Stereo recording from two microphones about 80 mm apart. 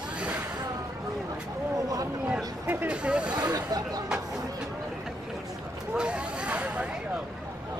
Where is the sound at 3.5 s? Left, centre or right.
Right.